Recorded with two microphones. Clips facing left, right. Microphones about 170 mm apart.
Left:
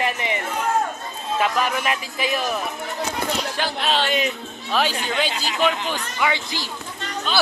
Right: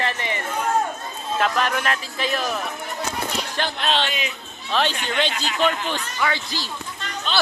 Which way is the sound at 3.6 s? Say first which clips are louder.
Right 2 dB; 10° left (ahead or behind).